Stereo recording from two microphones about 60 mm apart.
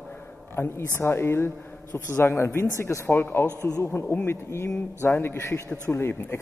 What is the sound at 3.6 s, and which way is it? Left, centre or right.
A man's voice, left.